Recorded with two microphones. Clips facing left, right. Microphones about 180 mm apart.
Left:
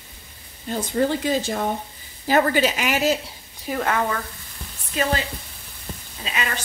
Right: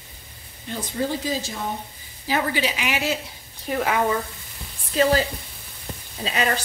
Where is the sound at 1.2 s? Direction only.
60° left (ahead or behind).